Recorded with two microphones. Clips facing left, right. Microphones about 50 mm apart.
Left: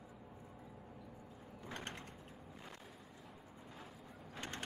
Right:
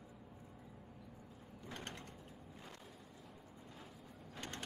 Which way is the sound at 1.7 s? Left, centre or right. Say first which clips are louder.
Left 2 dB; left.